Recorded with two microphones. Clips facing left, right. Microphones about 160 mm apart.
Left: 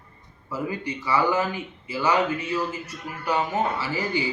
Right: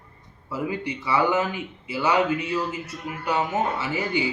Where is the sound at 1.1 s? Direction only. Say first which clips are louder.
Right 1 dB; 20° right (ahead or behind).